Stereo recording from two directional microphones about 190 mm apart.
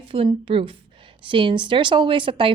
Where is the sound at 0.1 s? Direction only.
30° right (ahead or behind).